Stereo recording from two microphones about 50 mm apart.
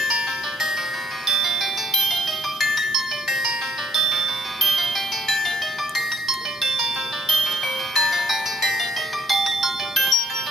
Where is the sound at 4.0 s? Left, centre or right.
Centre.